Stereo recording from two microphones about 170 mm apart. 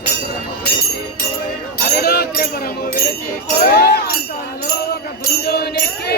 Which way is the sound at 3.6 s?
65° left (ahead or behind).